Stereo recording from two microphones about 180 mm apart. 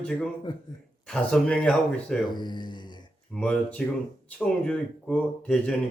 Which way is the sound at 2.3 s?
25° left (ahead or behind).